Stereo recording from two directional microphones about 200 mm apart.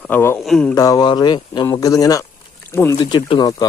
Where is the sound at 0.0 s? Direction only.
10° left (ahead or behind).